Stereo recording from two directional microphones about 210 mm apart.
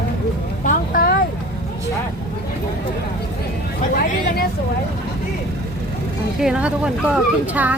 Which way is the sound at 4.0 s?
45° left (ahead or behind).